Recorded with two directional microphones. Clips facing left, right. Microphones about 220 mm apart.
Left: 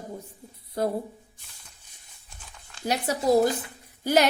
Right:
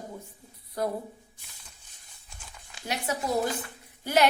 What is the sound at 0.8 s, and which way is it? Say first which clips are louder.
Speech: left 3 dB; 25° left (ahead or behind).